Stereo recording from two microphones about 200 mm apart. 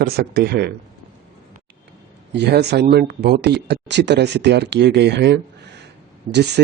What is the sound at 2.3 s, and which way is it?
Speech, 55° right (ahead or behind).